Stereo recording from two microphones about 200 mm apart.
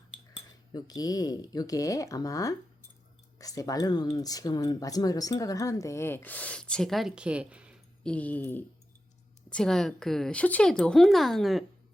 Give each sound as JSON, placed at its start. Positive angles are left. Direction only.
{"t": 0.7, "sound": "speech", "side_deg": 20}
{"t": 8.0, "sound": "a woman's voice", "side_deg": 5}